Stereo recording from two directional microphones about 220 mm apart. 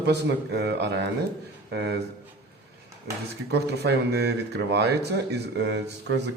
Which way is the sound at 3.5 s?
50° right (ahead or behind).